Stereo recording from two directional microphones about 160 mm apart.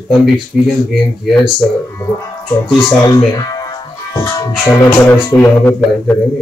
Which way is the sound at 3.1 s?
25° left (ahead or behind).